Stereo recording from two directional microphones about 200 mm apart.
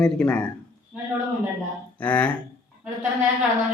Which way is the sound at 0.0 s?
5° left (ahead or behind).